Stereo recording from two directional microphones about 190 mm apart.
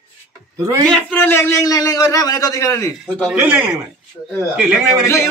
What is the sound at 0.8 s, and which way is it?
A man's voice, 5° left (ahead or behind).